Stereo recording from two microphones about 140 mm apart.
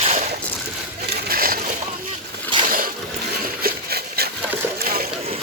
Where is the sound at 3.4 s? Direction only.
90° right.